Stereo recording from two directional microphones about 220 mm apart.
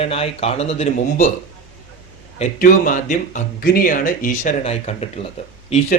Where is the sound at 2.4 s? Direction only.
35° left (ahead or behind).